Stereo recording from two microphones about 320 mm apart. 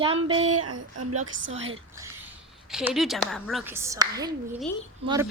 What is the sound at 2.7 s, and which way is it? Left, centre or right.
A woman's voice, centre.